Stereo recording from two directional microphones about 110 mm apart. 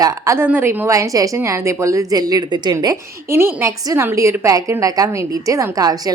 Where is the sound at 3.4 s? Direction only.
20° right (ahead or behind).